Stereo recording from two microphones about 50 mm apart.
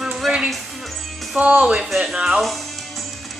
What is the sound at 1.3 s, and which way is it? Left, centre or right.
A man's voice, right.